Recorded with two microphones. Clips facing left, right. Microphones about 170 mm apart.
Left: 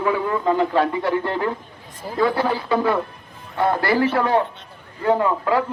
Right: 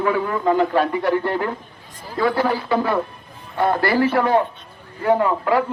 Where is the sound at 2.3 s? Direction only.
20° left (ahead or behind).